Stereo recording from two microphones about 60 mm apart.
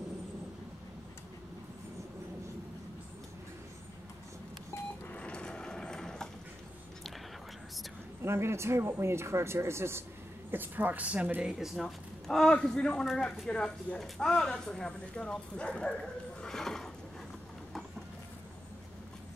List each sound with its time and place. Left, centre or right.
5.1 s a sound: centre
8.2 s speech: right
10.5 s speech: right
11.5 s speech: centre
12.3 s a man's voice: centre